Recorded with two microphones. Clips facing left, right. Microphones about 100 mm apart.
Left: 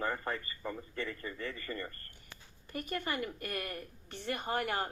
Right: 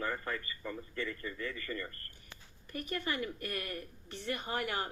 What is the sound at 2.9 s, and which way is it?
Speech, 20° left (ahead or behind).